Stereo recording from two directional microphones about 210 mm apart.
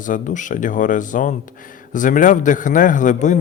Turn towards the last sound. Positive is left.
turn(degrees=35)  # may be behind; listen again after turning